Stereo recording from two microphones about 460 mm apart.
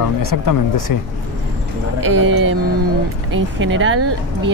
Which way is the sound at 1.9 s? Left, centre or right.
Right.